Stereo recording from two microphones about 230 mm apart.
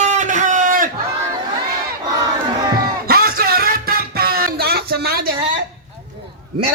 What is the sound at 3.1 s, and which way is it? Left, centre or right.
Music, right.